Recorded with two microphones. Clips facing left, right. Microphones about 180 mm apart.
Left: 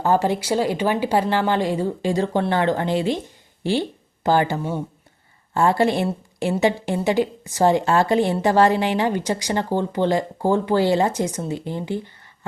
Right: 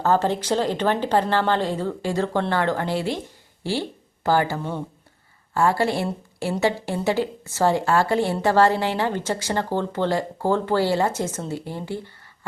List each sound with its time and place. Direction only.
0.0 s a woman's voice: 10° left (ahead or behind)